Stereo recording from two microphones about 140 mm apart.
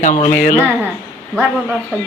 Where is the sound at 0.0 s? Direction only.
60° left (ahead or behind).